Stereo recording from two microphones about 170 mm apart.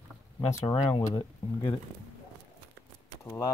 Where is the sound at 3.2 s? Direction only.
15° left (ahead or behind).